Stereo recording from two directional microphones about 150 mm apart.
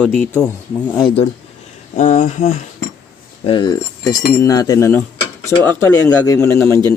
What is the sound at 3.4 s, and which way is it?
Speech, 30° left (ahead or behind).